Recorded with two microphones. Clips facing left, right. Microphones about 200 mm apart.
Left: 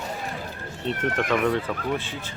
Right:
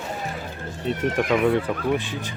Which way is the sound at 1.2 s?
10° right (ahead or behind).